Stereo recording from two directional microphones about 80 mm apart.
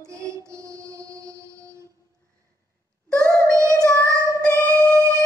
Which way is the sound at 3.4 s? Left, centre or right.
Right.